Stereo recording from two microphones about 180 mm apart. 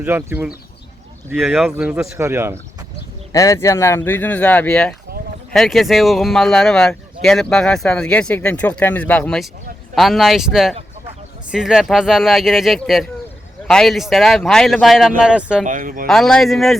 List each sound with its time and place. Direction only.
0.0 s speech: 10° right (ahead or behind)
1.4 s speech: centre (ahead or behind)
3.3 s speech: 15° left (ahead or behind); by 15.6 s 5° right (ahead or behind)
15.6 s speech: 45° right (ahead or behind)
16.0 s speech: centre (ahead or behind)